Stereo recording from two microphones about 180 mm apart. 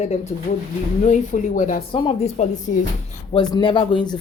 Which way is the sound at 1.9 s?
30° left (ahead or behind).